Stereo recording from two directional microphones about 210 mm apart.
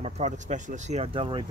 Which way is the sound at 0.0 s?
35° right (ahead or behind).